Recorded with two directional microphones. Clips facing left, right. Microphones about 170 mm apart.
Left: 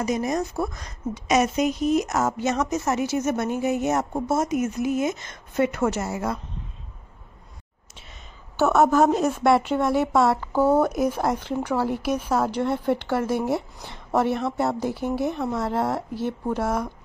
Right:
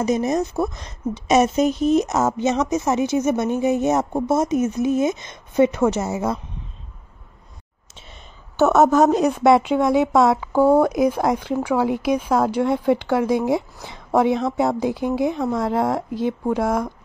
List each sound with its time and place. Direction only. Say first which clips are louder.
0.0 s a woman's voice: right 4 dB; 25° right (ahead or behind)
8.9 s a woman's voice: right 3 dB; centre (ahead or behind)
9.4 s a woman's voice: right 5 dB; 15° right (ahead or behind)